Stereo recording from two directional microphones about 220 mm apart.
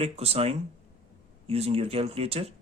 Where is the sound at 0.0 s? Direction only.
25° right (ahead or behind).